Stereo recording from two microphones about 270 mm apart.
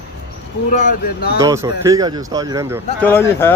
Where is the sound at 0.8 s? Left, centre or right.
Left.